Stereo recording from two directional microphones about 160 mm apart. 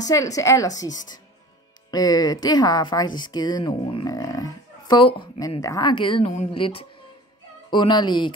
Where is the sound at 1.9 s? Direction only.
25° left (ahead or behind).